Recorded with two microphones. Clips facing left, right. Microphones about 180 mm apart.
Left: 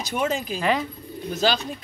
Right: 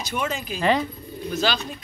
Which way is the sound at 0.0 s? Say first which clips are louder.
Left 3 dB; 45° left (ahead or behind).